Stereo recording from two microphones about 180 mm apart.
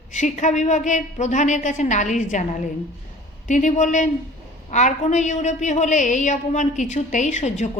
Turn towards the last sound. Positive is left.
turn(degrees=40)  # may be behind; listen again after turning